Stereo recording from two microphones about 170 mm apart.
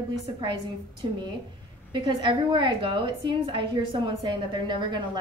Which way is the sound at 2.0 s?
30° right (ahead or behind).